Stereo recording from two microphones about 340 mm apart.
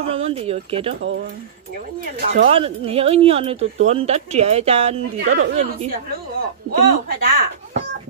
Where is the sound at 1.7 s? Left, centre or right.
Right.